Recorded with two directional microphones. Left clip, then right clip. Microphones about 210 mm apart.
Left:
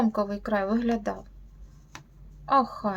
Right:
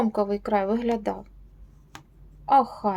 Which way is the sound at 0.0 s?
15° right (ahead or behind).